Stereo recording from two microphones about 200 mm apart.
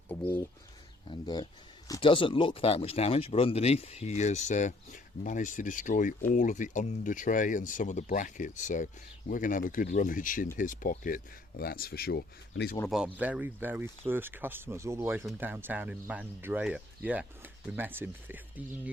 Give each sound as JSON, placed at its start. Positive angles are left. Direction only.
{"t": 0.1, "sound": "speech", "side_deg": 10}
{"t": 1.9, "sound": "speech", "side_deg": 25}
{"t": 12.9, "sound": "speech", "side_deg": -5}